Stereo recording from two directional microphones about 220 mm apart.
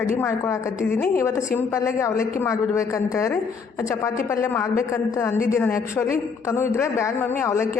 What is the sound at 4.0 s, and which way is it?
A man's voice, 15° left (ahead or behind).